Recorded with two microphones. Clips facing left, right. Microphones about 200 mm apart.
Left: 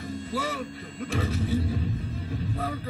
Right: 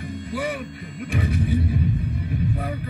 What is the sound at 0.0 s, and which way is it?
Speech, 15° right (ahead or behind).